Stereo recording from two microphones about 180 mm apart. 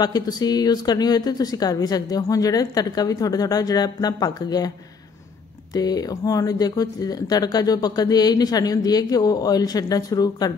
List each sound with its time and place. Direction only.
0.0 s speech: 20° left (ahead or behind)